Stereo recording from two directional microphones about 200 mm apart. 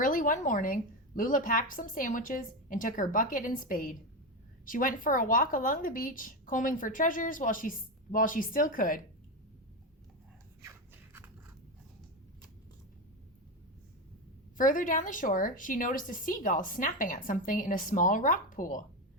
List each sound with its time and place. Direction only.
0.0 s a woman's voice: 40° left (ahead or behind)
10.6 s a sound: 15° right (ahead or behind)
14.6 s a woman's voice: 40° left (ahead or behind)